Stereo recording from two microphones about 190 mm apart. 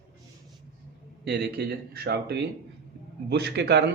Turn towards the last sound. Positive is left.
turn(degrees=-65)  # may be behind; listen again after turning